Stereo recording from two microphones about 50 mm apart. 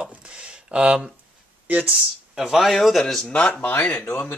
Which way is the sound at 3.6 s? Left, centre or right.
Left.